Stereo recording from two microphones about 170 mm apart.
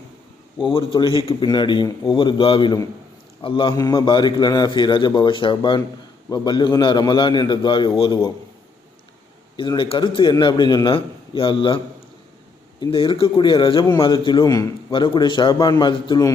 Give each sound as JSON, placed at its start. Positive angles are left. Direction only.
{"t": 0.6, "sound": "a man's voice", "side_deg": 30}
{"t": 9.6, "sound": "a man's voice", "side_deg": 30}
{"t": 12.8, "sound": "a man's voice", "side_deg": 30}